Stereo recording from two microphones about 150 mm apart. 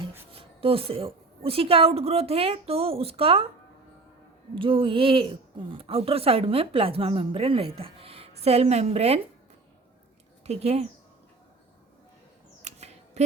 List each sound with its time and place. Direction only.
0.3 s a woman's voice: 40° right (ahead or behind)
4.5 s a woman's voice: 35° right (ahead or behind)
10.4 s a woman's voice: 45° right (ahead or behind)
12.6 s a sound: 45° right (ahead or behind)